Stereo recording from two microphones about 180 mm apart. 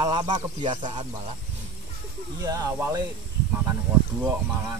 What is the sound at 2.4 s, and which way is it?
Speech, 20° right (ahead or behind).